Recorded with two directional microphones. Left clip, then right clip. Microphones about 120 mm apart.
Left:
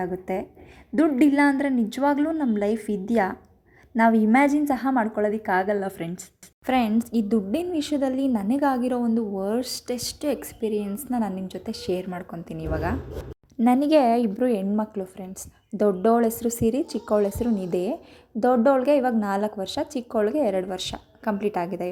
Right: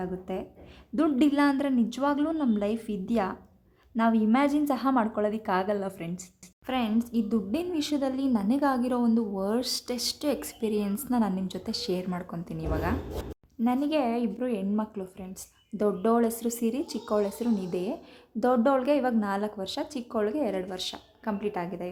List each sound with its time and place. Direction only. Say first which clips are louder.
0.0 s a woman's voice: left 6 dB; 25° left (ahead or behind)
1.0 s a woman's voice: left 4 dB; 15° left (ahead or behind)
6.7 s a woman's voice: left 6 dB; 40° left (ahead or behind)
7.5 s a woman's voice: left 4 dB; 20° left (ahead or behind)
13.7 s a woman's voice: left 8 dB; 50° left (ahead or behind)
14.9 s a woman's voice: left 6 dB; 30° left (ahead or behind)
18.3 s a woman's voice: left 5 dB; 20° left (ahead or behind); by 21.8 s 40° left (ahead or behind)